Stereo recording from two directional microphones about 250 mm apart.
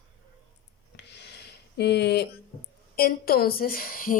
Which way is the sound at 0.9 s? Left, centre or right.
Left.